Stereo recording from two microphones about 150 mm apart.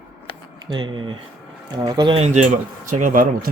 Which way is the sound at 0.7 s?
30° right (ahead or behind).